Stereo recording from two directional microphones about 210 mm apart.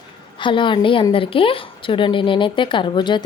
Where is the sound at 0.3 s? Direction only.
20° left (ahead or behind).